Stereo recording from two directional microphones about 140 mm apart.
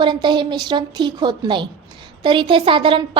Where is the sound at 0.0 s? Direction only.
35° right (ahead or behind).